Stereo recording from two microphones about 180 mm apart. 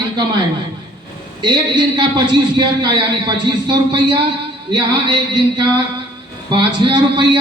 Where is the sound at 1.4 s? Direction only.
25° right (ahead or behind).